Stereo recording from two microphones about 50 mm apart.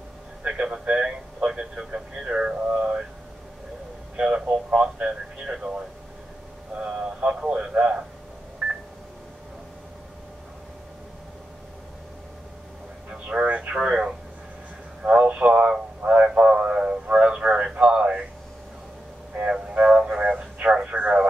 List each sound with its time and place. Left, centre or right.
0.4 s a sound: right
1.5 s radio: centre
4.2 s radio: centre
6.8 s a sound: centre
7.3 s speech: centre
8.6 s telephone dialing: centre
13.1 s radio: right
15.0 s a sound: right
16.0 s radio: right
19.4 s music: right
20.0 s radio: centre